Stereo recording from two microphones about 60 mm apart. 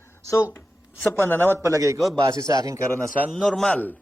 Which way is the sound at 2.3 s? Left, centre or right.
Right.